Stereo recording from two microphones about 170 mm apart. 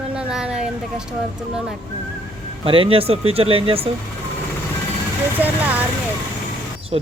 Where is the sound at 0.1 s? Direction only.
5° right (ahead or behind).